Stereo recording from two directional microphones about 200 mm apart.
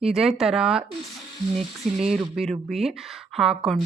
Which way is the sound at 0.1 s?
Centre (ahead or behind).